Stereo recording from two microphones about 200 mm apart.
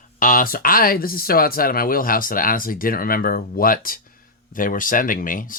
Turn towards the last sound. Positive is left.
turn(degrees=45)  # may be behind; listen again after turning